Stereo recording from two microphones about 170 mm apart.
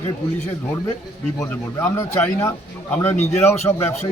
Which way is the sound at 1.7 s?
15° left (ahead or behind).